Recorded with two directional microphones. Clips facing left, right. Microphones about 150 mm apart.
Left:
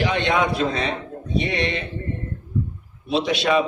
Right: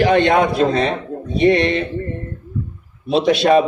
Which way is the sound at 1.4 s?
40° right (ahead or behind).